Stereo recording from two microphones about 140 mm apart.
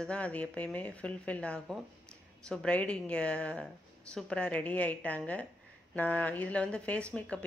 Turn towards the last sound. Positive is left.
turn(degrees=10)  # may be behind; listen again after turning